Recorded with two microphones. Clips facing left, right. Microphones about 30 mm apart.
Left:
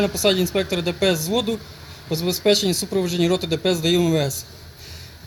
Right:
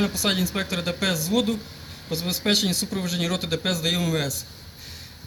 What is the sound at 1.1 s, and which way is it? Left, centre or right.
A man's voice, left.